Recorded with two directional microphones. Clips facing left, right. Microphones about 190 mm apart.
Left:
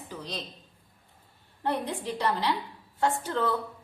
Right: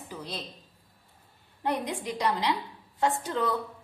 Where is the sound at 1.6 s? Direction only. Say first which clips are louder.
Even; 15° right (ahead or behind).